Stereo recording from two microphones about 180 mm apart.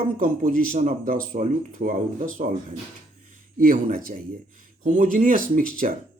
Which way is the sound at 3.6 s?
50° right (ahead or behind).